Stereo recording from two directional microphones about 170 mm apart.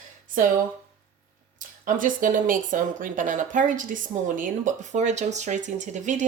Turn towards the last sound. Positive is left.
turn(degrees=-45)  # may be behind; listen again after turning